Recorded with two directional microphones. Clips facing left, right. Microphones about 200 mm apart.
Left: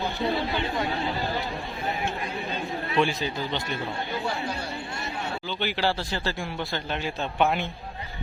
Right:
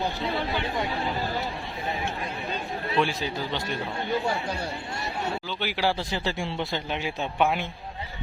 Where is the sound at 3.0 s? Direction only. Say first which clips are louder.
Left 2 dB; 10° right (ahead or behind).